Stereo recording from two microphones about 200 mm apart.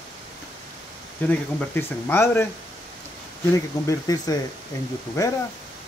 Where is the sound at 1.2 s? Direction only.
10° left (ahead or behind).